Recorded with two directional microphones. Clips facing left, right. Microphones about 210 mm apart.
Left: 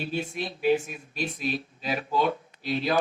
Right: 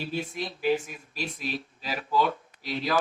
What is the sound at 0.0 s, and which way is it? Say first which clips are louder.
Speech: left 1 dB; 25° left (ahead or behind).